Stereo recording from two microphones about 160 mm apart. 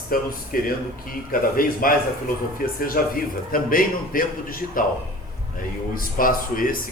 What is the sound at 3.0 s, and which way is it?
A man's voice, 65° left (ahead or behind).